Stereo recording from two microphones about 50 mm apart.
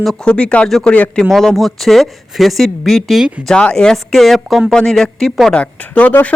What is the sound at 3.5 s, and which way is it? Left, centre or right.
Speech, centre.